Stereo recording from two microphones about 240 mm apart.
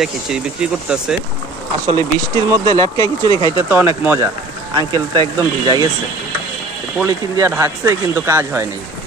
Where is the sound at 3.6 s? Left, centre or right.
Centre.